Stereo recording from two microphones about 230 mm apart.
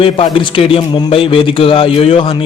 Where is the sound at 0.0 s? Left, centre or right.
Left.